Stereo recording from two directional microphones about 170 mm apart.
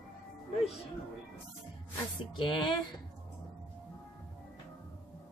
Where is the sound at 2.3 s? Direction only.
30° left (ahead or behind).